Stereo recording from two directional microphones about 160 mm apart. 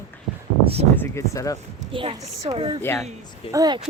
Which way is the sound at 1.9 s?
30° right (ahead or behind).